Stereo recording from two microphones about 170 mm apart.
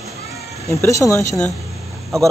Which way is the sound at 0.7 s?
15° left (ahead or behind).